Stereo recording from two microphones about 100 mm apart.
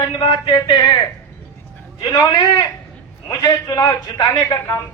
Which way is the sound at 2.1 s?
40° left (ahead or behind).